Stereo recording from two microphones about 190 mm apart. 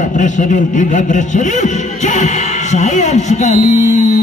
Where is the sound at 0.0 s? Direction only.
40° left (ahead or behind).